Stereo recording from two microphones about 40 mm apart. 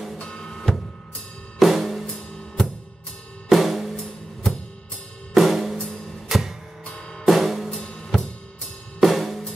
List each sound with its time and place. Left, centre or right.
0.2 s drum: left
1.6 s drum kit: centre
3.4 s drum kit: centre
3.9 s drum: centre
5.3 s drum kit: centre
6.2 s music: centre
6.9 s drum: left
7.2 s drum kit: centre
7.7 s drum kit: left
9.0 s drum kit: centre